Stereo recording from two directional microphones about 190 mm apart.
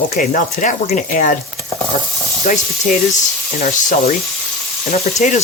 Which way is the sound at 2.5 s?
45° left (ahead or behind).